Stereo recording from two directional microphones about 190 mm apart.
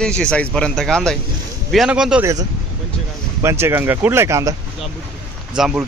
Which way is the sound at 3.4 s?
15° right (ahead or behind).